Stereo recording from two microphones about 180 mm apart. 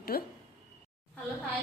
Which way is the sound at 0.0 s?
55° left (ahead or behind).